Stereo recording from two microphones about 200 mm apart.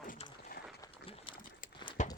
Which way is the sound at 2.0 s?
35° left (ahead or behind).